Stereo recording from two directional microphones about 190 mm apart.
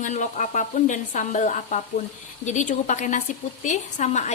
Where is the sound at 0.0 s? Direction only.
40° left (ahead or behind).